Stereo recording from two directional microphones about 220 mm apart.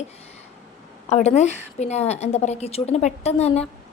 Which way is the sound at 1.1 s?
30° left (ahead or behind).